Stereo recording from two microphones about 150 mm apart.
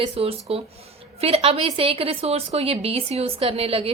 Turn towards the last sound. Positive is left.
turn(degrees=-40)  # may be behind; listen again after turning